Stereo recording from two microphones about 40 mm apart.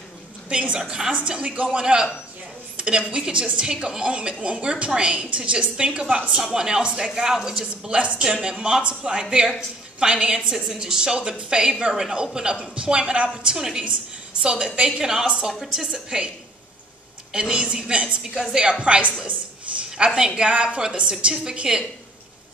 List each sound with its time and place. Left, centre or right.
0.5 s a woman's voice: right
0.7 s a woman's voice: centre
1.1 s a woman's voice: right
6.3 s a woman's voice: centre
7.2 s a woman's voice: centre
7.9 s a woman's voice: right
8.2 s a woman's voice: centre
15.9 s a woman's voice: centre
17.3 s a woman's voice: centre
19.8 s a sound: right
20.3 s a woman's voice: right